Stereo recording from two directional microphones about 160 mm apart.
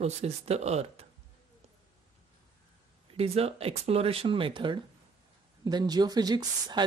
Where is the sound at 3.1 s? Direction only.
40° right (ahead or behind).